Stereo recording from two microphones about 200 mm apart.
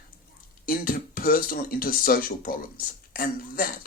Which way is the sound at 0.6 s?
45° left (ahead or behind).